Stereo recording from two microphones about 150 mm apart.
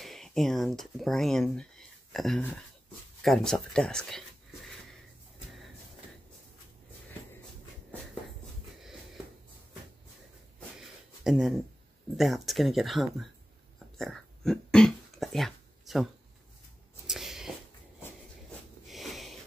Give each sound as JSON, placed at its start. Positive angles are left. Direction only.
{"t": 0.0, "sound": "speech", "side_deg": 0}
{"t": 10.8, "sound": "a sound", "side_deg": 0}
{"t": 12.2, "sound": "speech", "side_deg": 0}
{"t": 13.9, "sound": "throat clearing", "side_deg": 5}
{"t": 17.1, "sound": "a sound", "side_deg": 0}
{"t": 18.9, "sound": "sniff", "side_deg": 0}